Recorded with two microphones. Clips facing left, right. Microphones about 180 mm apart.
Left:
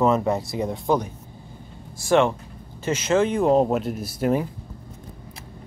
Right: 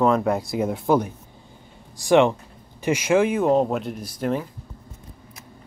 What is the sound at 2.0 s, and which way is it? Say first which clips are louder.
Speech: right 2 dB; 15° right (ahead or behind).